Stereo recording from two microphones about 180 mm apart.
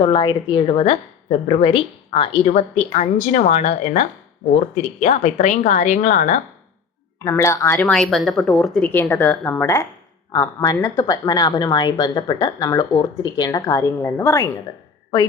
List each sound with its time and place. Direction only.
0.0 s a woman's voice: 30° left (ahead or behind)
7.3 s a woman's voice: 15° left (ahead or behind)
7.8 s a woman's voice: 5° left (ahead or behind)